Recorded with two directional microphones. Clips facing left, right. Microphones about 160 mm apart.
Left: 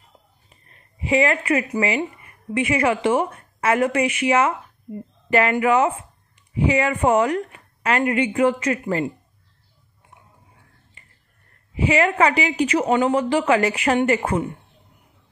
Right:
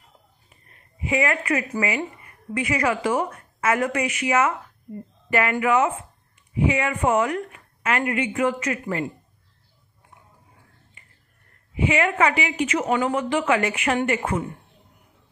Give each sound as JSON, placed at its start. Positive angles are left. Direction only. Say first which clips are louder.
{"t": 1.0, "sound": "a woman's voice", "louder": "left 4 dB", "side_deg": 30}
{"t": 11.7, "sound": "a woman's voice", "louder": "left 3 dB", "side_deg": 35}